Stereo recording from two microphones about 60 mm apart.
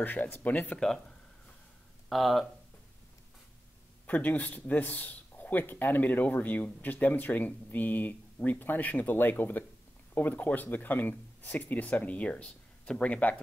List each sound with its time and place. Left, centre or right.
0.0 s speech: left
0.7 s speech: centre
2.0 s speech: centre
4.1 s speech: left